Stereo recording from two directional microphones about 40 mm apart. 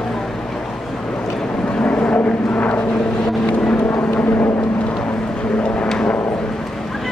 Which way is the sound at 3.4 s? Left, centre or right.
Left.